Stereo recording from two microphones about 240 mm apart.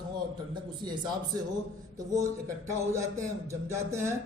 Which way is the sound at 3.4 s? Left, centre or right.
Centre.